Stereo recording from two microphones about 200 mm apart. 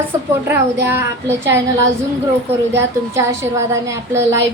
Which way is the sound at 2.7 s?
10° right (ahead or behind).